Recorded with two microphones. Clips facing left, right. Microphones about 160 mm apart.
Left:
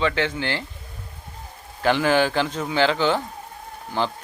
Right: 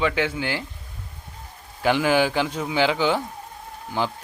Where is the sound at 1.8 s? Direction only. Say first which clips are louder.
Even; 10° right (ahead or behind).